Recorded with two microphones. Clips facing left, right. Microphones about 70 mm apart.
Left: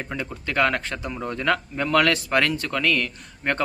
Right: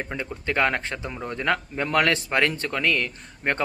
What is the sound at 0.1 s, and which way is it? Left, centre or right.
A man's voice, right.